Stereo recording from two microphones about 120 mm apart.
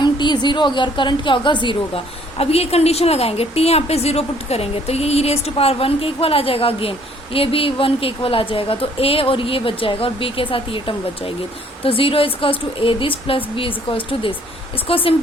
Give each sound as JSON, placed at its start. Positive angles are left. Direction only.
{"t": 0.0, "sound": "a woman's voice", "side_deg": 40}
{"t": 2.4, "sound": "a woman's voice", "side_deg": 55}